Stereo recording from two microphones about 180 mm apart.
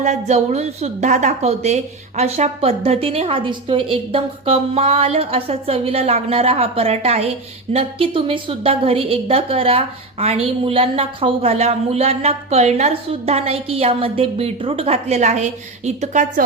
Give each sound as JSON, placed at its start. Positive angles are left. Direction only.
{"t": 0.0, "sound": "a woman's voice", "side_deg": -40}